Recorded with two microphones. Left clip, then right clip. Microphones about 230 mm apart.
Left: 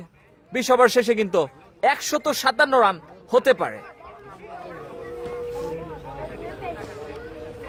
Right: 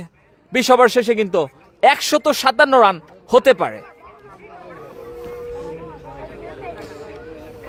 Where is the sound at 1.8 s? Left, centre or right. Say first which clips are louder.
Right 7 dB; right.